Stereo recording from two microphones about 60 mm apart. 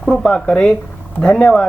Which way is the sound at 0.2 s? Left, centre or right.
Centre.